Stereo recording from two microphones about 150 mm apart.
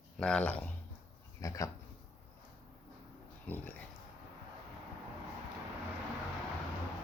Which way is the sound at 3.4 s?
10° left (ahead or behind).